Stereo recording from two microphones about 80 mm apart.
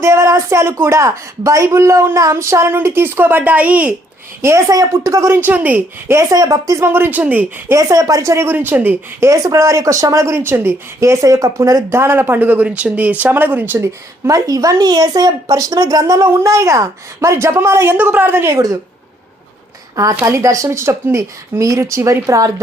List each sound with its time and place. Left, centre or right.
0.0 s a woman's voice: right; by 3.9 s centre
4.4 s speech: right
5.4 s a woman's voice: right
6.1 s speech: right
6.8 s a woman's voice: right
7.7 s speech: right
8.5 s a woman's voice: right
9.2 s speech: right
10.3 s speech: right
17.9 s a woman's voice: right
18.5 s speech: right
20.2 s speech: right